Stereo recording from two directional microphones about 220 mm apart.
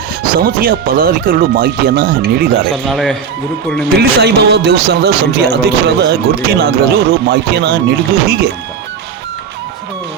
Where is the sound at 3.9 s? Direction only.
45° right (ahead or behind).